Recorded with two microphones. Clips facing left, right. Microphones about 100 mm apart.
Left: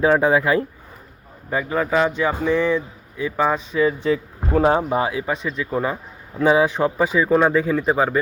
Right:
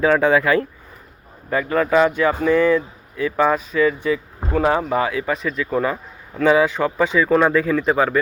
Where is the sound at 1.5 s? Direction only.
15° left (ahead or behind).